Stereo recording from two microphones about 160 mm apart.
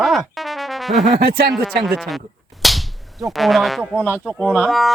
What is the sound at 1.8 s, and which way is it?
Speech, centre (ahead or behind).